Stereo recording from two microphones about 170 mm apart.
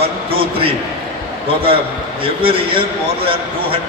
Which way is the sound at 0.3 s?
35° right (ahead or behind).